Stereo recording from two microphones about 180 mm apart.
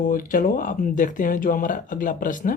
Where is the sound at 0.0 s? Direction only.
50° left (ahead or behind).